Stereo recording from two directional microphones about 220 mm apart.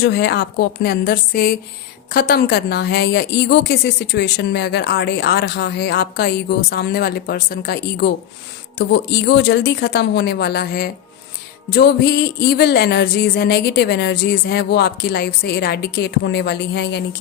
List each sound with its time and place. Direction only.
0.0 s a woman's voice: 50° left (ahead or behind)